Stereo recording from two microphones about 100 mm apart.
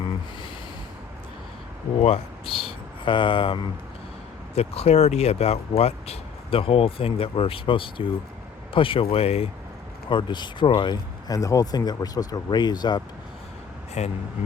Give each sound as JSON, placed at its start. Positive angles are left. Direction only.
{"t": 2.0, "sound": "speech", "side_deg": 85}
{"t": 4.5, "sound": "speech", "side_deg": 85}
{"t": 10.1, "sound": "speech", "side_deg": 50}
{"t": 11.3, "sound": "speech", "side_deg": 35}
{"t": 14.0, "sound": "speech", "side_deg": 90}